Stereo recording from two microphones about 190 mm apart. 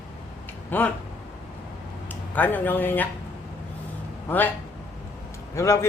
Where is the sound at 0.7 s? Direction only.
10° left (ahead or behind).